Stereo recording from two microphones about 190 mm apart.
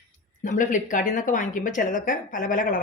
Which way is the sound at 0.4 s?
40° left (ahead or behind).